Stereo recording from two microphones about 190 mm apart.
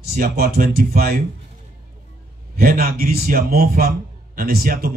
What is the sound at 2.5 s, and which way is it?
A man's voice, 50° right (ahead or behind).